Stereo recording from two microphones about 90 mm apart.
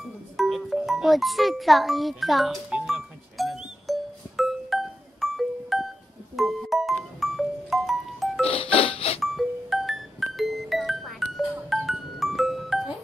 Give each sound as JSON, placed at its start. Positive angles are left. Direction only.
{"t": 0.4, "sound": "music", "side_deg": 0}
{"t": 8.5, "sound": "music", "side_deg": 90}
{"t": 9.2, "sound": "music", "side_deg": 0}